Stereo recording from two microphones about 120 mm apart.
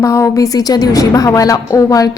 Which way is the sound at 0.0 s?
25° left (ahead or behind).